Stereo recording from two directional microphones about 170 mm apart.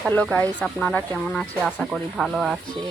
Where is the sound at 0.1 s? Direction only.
10° left (ahead or behind).